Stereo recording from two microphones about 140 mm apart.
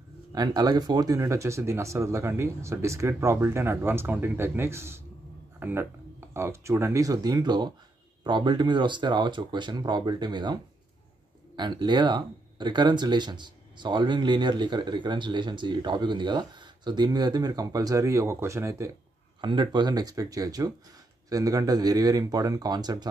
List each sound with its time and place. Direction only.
0.3 s speech: 25° right (ahead or behind)
19.4 s speech: 35° right (ahead or behind)